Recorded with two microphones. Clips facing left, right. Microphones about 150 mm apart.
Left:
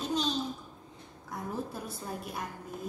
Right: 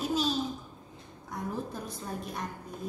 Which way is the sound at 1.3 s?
Centre (ahead or behind).